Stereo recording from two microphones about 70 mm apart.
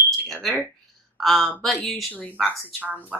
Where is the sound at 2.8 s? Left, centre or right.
Right.